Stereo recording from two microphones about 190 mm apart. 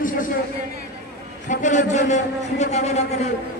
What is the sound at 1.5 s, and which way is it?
A man's voice, 40° left (ahead or behind).